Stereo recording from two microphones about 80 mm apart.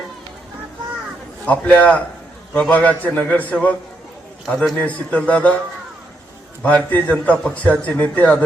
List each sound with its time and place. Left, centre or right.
1.5 s a man's voice: centre
4.4 s a man's voice: centre
4.8 s a man's voice: centre
6.9 s a man's voice: centre